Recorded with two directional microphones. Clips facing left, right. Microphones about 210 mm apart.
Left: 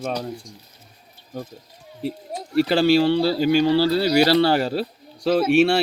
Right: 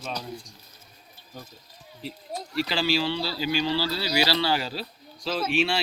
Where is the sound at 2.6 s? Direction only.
50° left (ahead or behind).